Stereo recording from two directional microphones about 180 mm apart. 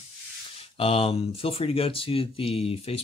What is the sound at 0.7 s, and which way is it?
Speech, 30° left (ahead or behind).